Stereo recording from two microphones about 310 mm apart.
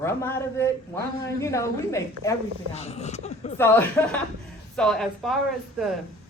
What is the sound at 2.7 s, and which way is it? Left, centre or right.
Speech, left.